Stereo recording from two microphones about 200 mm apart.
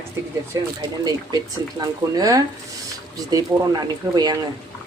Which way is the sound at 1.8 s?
15° right (ahead or behind).